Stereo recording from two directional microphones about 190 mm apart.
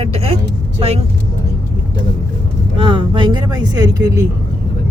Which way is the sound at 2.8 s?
25° right (ahead or behind).